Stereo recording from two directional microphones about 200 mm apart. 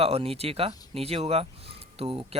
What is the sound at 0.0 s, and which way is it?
Speech, 30° right (ahead or behind).